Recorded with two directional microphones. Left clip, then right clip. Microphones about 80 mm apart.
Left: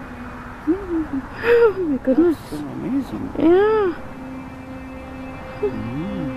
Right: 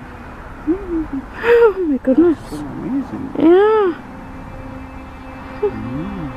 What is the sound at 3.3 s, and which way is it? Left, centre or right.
Speech, centre.